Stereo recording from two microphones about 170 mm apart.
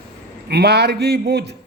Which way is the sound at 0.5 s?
75° right (ahead or behind).